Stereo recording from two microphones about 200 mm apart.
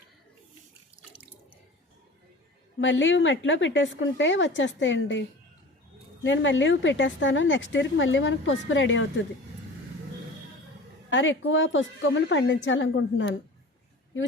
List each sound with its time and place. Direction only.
2.8 s a woman's voice: 70° left (ahead or behind)
6.2 s a woman's voice: 70° left (ahead or behind)
11.1 s a woman's voice: 70° left (ahead or behind)